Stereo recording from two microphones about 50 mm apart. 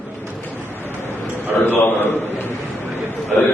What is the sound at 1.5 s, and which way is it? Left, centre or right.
Speech, left.